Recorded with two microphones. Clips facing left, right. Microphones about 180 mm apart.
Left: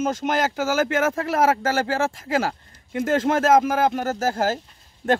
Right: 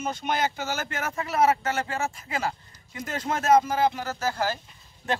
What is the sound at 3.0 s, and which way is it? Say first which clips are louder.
Speech: left 10 dB; 50° left (ahead or behind).